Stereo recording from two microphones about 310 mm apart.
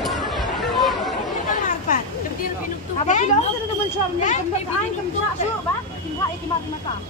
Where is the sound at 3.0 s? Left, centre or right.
Left.